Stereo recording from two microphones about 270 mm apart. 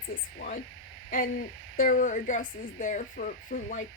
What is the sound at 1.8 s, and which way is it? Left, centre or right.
Speech, left.